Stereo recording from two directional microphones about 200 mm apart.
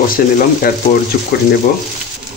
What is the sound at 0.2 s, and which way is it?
Speech, 45° left (ahead or behind).